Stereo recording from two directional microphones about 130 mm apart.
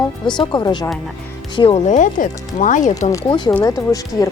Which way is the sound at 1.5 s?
45° left (ahead or behind).